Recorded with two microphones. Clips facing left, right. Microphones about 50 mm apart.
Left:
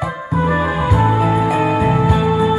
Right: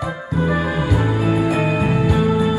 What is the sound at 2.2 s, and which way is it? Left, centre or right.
Music, left.